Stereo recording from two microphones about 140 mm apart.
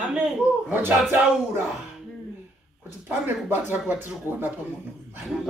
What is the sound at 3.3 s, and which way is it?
Speech, 15° right (ahead or behind).